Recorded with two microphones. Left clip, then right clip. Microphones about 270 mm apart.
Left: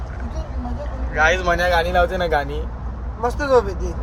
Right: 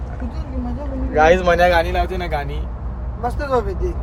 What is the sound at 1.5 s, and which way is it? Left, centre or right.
Speech, right.